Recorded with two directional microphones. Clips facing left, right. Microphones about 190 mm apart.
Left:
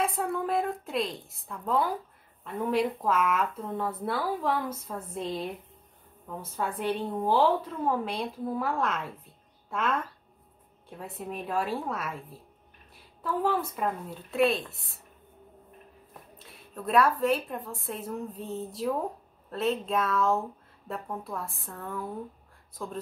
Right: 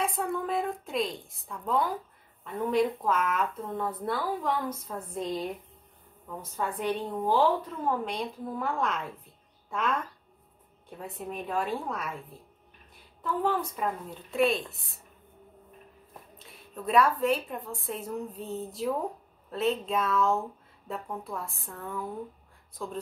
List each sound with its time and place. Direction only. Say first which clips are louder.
0.0 s a woman's voice: left 1 dB; centre (ahead or behind)
11.0 s a woman's voice: even; centre (ahead or behind)
13.2 s a woman's voice: left 1 dB; 5° left (ahead or behind)
16.3 s a woman's voice: even; centre (ahead or behind)